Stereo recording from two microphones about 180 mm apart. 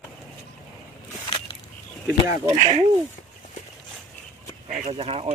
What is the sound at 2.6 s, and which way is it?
Speech, 40° right (ahead or behind).